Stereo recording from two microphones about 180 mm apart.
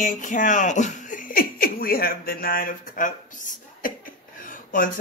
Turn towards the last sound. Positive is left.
turn(degrees=50)  # may be behind; listen again after turning